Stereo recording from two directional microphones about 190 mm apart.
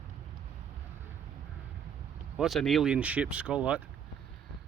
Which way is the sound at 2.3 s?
Centre (ahead or behind).